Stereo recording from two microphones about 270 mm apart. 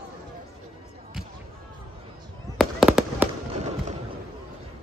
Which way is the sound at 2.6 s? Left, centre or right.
Centre.